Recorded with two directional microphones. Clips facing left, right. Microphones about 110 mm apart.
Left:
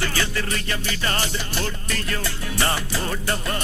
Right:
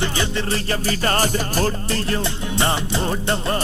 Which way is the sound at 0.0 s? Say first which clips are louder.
Right 3 dB; 25° right (ahead or behind).